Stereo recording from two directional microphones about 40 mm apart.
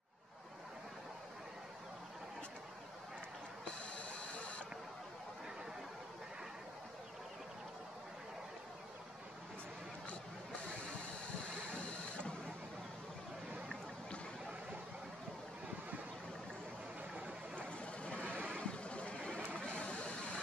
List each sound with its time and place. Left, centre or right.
3.6 s printer: left
11.7 s printer: left
17.6 s a sound: left
18.2 s vehicle: right
18.7 s vehicle: left